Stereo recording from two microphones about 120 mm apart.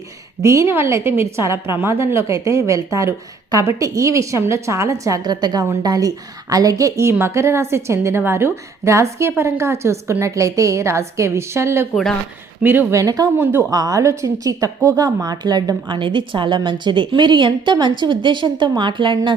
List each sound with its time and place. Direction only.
0.4 s a woman's voice: 25° right (ahead or behind)
13.0 s a woman's voice: 30° right (ahead or behind)
13.3 s a woman's voice: 20° right (ahead or behind)
13.7 s a woman's voice: 30° right (ahead or behind)